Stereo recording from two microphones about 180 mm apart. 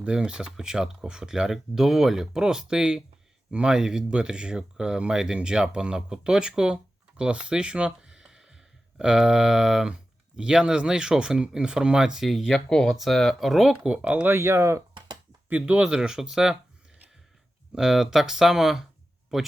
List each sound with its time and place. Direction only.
0.0 s speech: 5° right (ahead or behind)
14.9 s a sound: 25° right (ahead or behind)
15.4 s speech: 10° right (ahead or behind)
17.7 s speech: centre (ahead or behind)